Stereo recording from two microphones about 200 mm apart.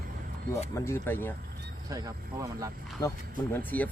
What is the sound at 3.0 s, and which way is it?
Speech, 15° left (ahead or behind).